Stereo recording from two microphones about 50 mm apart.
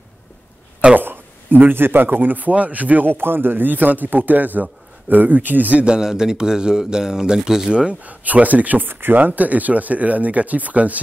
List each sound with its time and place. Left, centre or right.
0.9 s speech: right
5.9 s speech: centre
8.0 s speech: right